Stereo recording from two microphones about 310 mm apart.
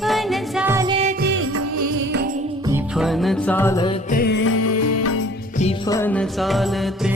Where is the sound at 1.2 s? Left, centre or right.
Right.